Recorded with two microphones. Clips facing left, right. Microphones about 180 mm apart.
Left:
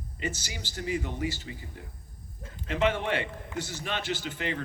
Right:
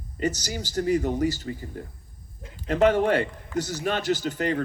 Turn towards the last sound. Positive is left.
turn(degrees=-40)  # may be behind; listen again after turning